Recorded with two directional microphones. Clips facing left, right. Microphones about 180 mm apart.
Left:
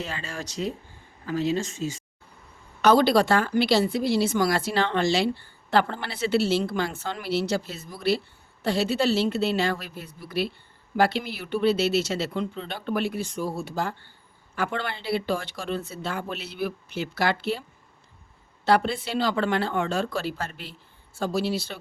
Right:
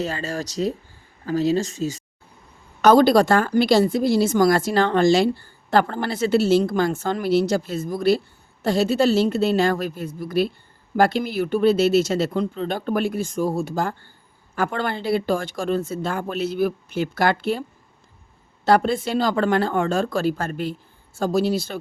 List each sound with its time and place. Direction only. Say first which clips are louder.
0.0 s a woman's voice: right 8 dB; 40° right (ahead or behind)
18.6 s a woman's voice: right 4 dB; 45° right (ahead or behind)